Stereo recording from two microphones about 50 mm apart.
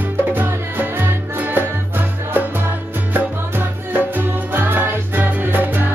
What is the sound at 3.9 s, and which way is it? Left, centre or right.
Music, right.